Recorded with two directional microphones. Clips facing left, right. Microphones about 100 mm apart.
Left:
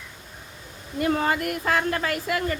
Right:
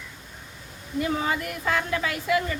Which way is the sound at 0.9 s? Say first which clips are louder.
Left 3 dB; 55° left (ahead or behind).